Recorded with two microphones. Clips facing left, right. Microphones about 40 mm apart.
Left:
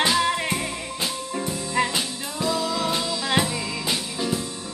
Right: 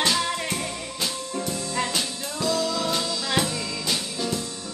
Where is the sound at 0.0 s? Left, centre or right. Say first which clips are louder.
Left 3 dB; centre.